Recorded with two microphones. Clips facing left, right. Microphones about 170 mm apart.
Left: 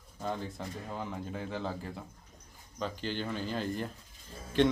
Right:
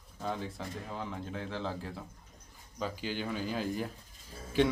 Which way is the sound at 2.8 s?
10° right (ahead or behind).